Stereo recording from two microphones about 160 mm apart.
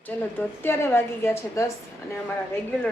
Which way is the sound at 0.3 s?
15° left (ahead or behind).